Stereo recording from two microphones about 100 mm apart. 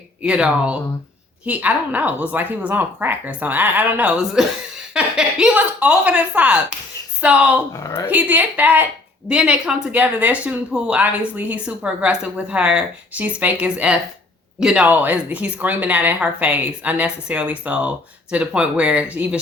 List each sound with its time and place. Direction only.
0.2 s a woman's voice: 10° right (ahead or behind)
7.7 s speech: 30° left (ahead or behind)
8.1 s a woman's voice: 15° right (ahead or behind)